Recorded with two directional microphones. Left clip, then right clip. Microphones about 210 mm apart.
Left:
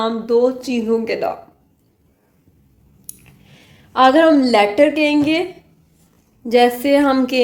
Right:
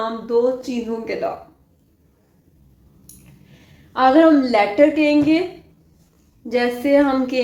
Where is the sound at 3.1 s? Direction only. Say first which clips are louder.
Left 7 dB; 55° left (ahead or behind).